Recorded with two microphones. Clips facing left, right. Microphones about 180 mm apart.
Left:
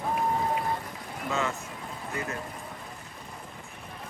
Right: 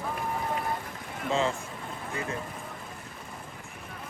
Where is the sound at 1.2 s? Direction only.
30° right (ahead or behind).